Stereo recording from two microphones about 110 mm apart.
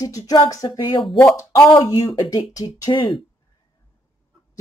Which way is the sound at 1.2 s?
30° left (ahead or behind).